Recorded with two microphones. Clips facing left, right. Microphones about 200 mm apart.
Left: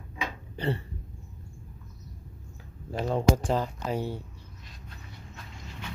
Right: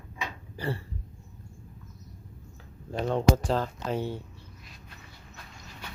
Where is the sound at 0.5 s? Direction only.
20° left (ahead or behind).